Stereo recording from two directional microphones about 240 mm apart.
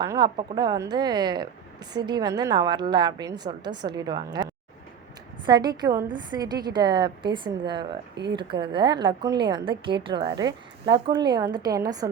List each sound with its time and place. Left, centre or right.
0.0 s a woman's voice: centre
8.1 s speech: right
8.4 s a woman's voice: centre